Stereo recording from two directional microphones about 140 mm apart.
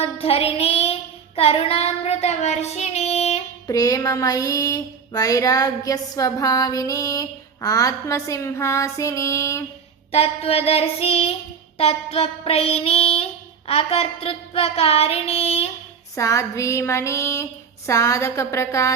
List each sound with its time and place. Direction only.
0.0 s child singing: 45° left (ahead or behind)
3.7 s child singing: 25° left (ahead or behind)
10.1 s child singing: 45° left (ahead or behind)
16.1 s child singing: 20° left (ahead or behind)